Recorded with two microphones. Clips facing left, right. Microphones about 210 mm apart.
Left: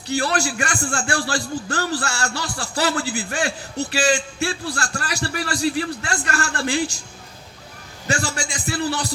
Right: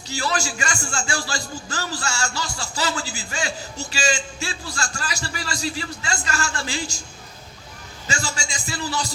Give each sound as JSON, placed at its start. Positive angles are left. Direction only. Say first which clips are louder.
{"t": 0.1, "sound": "a man's voice", "louder": "left 4 dB", "side_deg": 60}
{"t": 8.0, "sound": "a man's voice", "louder": "left 5 dB", "side_deg": 60}